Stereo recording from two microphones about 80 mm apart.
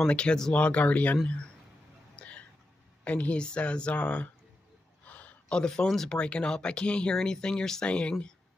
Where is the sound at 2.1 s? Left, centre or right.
Centre.